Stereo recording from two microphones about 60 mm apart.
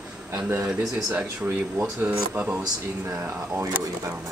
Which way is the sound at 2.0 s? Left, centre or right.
Right.